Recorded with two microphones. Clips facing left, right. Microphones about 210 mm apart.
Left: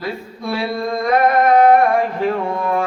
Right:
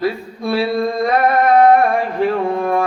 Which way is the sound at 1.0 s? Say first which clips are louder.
Left 2 dB; 30° right (ahead or behind).